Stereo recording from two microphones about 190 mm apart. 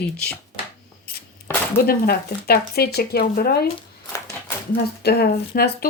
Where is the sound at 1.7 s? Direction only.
50° left (ahead or behind).